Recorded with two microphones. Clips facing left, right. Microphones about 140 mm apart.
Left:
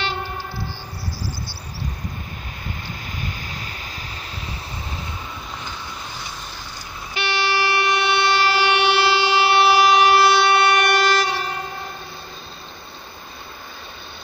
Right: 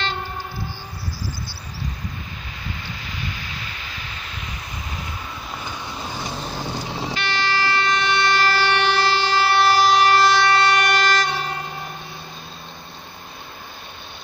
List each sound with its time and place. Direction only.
3.2 s a sound: 45° left (ahead or behind)
6.5 s vehicle: 55° right (ahead or behind); by 7.2 s 85° right
7.2 s train: 10° left (ahead or behind)